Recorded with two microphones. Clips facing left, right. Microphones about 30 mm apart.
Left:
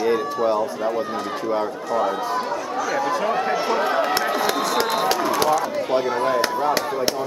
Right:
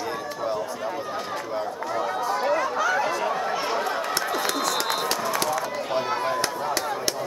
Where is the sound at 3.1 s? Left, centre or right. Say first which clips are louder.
Left 4 dB; centre.